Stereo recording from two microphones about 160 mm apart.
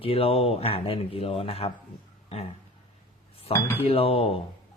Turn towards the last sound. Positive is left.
turn(degrees=35)  # may be behind; listen again after turning